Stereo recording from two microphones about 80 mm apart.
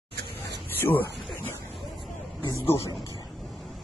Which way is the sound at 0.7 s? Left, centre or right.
Left.